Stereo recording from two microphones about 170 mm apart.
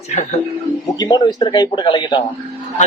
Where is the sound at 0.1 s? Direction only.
40° left (ahead or behind).